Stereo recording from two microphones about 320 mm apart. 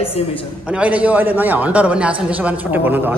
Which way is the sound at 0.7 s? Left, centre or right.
Centre.